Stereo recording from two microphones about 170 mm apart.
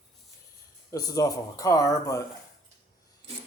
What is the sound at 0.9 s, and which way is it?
Speech, 20° left (ahead or behind).